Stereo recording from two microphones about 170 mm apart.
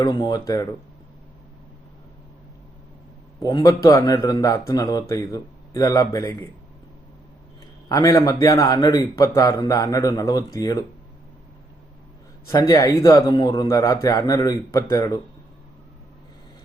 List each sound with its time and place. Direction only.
0.0 s a man's voice: 25° left (ahead or behind)
3.4 s a man's voice: 20° left (ahead or behind)
7.9 s a man's voice: 20° left (ahead or behind)
12.5 s a man's voice: 20° left (ahead or behind)